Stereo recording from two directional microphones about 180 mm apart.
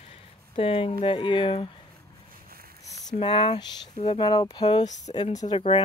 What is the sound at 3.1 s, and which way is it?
Speech, 30° left (ahead or behind).